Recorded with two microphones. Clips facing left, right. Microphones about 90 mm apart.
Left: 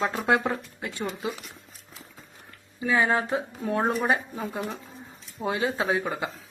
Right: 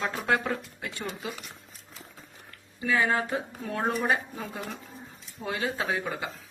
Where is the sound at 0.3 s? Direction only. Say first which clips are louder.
Left 2 dB; 25° left (ahead or behind).